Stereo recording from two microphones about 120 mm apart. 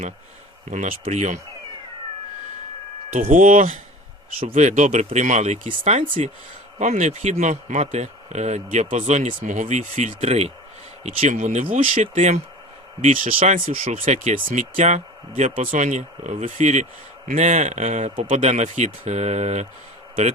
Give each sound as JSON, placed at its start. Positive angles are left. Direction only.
{"t": 1.1, "sound": "speech", "side_deg": -90}
{"t": 3.1, "sound": "speech", "side_deg": -90}
{"t": 6.7, "sound": "speech", "side_deg": -80}
{"t": 11.0, "sound": "speech", "side_deg": -75}
{"t": 12.1, "sound": "speech", "side_deg": -70}
{"t": 13.0, "sound": "speech", "side_deg": -90}
{"t": 14.8, "sound": "speech", "side_deg": -70}
{"t": 15.4, "sound": "speech", "side_deg": -90}